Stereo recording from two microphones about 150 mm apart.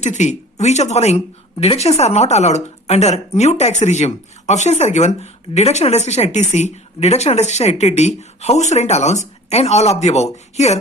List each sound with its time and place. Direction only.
0.0 s speech: 50° left (ahead or behind)